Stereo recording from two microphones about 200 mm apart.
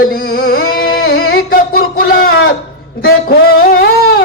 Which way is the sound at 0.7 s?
50° left (ahead or behind).